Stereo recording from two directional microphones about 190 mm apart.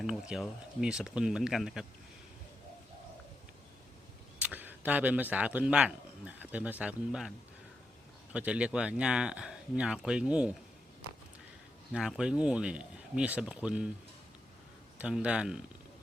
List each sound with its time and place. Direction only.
0.0 s speech: 5° right (ahead or behind)
4.4 s speech: 10° right (ahead or behind)
11.9 s speech: 5° right (ahead or behind)
14.9 s speech: 5° right (ahead or behind)